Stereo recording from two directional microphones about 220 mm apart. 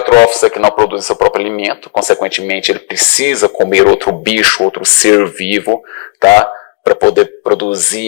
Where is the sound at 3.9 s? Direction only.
35° left (ahead or behind).